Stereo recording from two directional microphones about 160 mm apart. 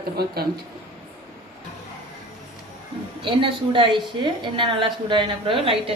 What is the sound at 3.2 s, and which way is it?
A woman's voice, 30° right (ahead or behind).